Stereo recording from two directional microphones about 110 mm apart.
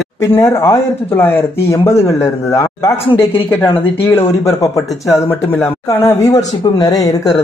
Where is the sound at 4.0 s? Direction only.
20° left (ahead or behind).